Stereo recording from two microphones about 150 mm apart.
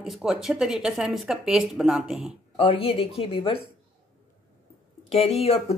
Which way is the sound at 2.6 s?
35° left (ahead or behind).